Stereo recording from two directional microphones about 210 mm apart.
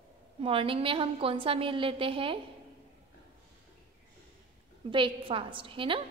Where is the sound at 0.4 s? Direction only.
25° right (ahead or behind).